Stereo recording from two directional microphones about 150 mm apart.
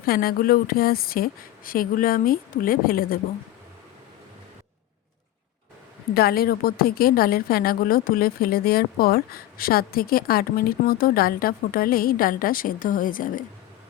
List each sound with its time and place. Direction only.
0.0 s speech: 85° left
6.1 s a woman's voice: 90° left; by 13.4 s 65° left (ahead or behind)